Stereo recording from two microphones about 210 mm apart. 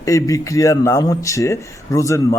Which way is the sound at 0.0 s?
15° left (ahead or behind).